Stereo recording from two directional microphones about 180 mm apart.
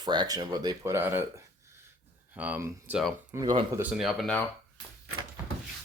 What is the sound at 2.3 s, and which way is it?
Speech, 10° right (ahead or behind).